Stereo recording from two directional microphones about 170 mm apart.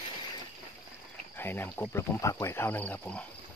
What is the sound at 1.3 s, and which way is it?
Speech, 10° left (ahead or behind).